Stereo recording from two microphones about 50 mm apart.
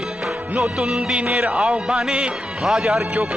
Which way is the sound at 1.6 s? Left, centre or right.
Centre.